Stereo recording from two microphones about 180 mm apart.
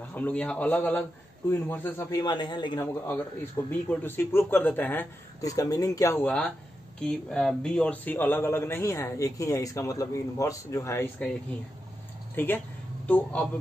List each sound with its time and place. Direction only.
0.1 s speech: 10° left (ahead or behind)
6.2 s speech: 5° left (ahead or behind)
12.4 s speech: 10° left (ahead or behind)